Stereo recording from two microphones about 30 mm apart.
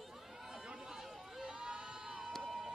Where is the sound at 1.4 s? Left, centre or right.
Right.